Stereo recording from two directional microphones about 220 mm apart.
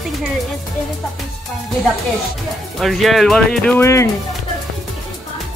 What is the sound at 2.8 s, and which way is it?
Speech, centre (ahead or behind).